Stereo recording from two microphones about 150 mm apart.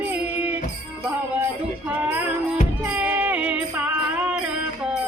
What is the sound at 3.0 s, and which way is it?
Music, 10° right (ahead or behind).